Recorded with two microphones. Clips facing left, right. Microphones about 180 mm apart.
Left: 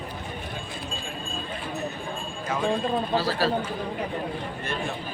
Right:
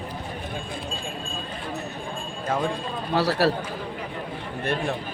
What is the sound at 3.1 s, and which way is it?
Speech, 70° right (ahead or behind).